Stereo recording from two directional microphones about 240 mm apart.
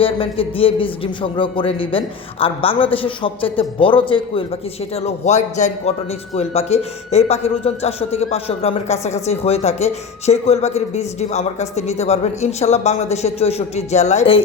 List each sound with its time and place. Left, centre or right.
0.0 s a man's voice: left